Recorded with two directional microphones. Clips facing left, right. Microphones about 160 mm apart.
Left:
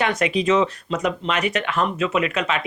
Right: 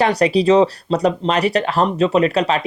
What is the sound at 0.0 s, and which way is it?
Speech, 35° right (ahead or behind).